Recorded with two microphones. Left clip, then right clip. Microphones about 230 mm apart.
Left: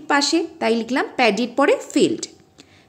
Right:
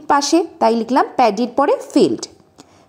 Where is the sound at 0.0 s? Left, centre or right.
Centre.